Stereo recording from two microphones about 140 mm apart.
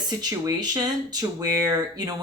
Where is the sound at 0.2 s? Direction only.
25° right (ahead or behind).